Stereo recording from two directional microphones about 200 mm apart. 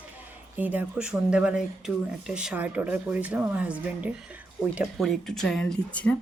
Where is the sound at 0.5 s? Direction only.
10° right (ahead or behind).